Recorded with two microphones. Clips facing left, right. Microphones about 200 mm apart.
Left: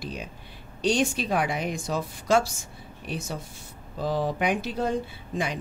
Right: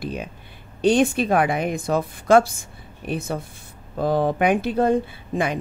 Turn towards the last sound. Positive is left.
turn(degrees=-55)  # may be behind; listen again after turning